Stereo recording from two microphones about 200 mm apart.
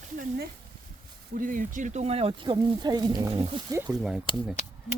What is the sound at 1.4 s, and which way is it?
Speech, 40° right (ahead or behind).